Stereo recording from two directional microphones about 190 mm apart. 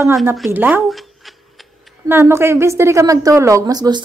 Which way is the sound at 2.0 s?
15° right (ahead or behind).